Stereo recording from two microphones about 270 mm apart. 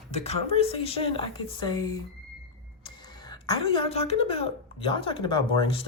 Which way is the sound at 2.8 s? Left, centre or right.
Centre.